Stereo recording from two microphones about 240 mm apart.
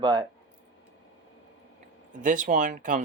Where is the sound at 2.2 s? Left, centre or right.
Right.